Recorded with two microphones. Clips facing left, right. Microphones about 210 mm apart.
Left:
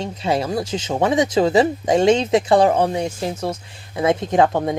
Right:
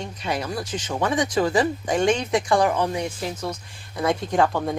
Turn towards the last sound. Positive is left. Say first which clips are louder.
# left 4 dB
turn(degrees=20)  # may be behind; listen again after turning